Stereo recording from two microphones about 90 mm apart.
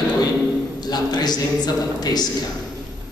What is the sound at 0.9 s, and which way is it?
A man's voice, 50° left (ahead or behind).